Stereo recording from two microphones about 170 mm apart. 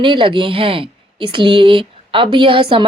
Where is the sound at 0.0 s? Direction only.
30° right (ahead or behind).